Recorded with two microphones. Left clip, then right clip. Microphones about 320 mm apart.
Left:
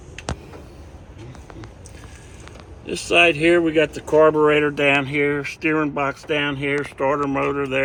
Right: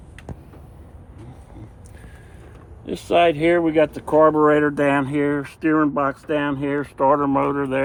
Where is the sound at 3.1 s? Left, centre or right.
Centre.